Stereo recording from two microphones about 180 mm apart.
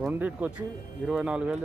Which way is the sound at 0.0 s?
10° right (ahead or behind).